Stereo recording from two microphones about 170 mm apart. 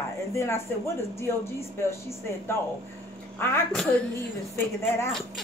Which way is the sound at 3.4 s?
15° left (ahead or behind).